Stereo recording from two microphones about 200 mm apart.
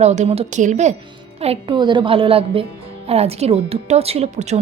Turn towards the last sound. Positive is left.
turn(degrees=-35)  # may be behind; listen again after turning